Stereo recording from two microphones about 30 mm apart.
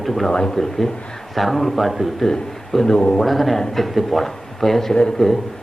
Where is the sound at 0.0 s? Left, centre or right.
Centre.